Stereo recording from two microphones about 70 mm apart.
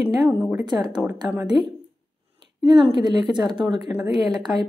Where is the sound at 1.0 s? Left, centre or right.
Centre.